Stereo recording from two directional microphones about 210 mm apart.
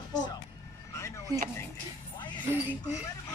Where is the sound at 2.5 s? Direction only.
10° right (ahead or behind).